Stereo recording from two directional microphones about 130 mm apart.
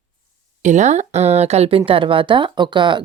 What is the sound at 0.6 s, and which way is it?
Speech, 65° right (ahead or behind).